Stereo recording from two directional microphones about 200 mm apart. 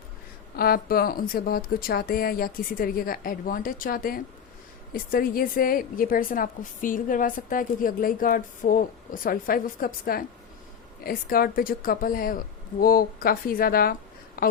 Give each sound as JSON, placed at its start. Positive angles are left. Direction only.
{"t": 0.5, "sound": "a woman's voice", "side_deg": 50}